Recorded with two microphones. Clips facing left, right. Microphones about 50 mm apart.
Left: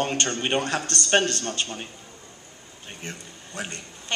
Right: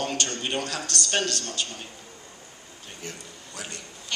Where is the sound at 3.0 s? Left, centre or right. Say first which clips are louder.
Left 1 dB; left.